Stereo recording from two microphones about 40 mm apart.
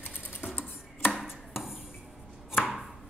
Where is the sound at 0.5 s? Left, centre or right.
Left.